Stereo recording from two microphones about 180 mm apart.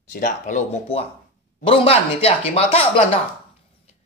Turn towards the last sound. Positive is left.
turn(degrees=35)  # may be behind; listen again after turning